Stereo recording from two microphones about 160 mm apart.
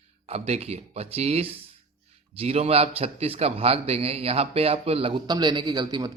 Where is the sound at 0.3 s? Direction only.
40° right (ahead or behind).